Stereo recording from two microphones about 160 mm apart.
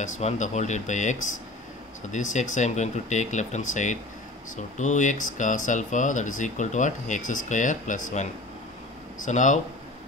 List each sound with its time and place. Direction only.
0.0 s speech: 50° left (ahead or behind)